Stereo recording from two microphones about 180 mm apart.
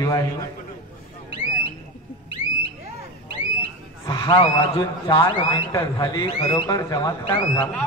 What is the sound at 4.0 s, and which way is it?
A man's voice, 20° left (ahead or behind).